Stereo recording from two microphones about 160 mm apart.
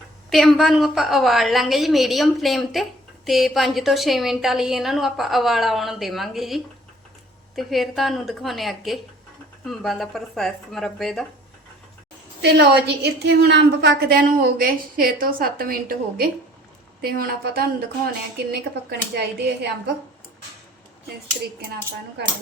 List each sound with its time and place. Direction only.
0.3 s a woman's voice: centre (ahead or behind)
12.4 s a woman's voice: 90° right; by 17.8 s 75° right (ahead or behind)
18.9 s speech: 90° right
22.2 s speech: 90° right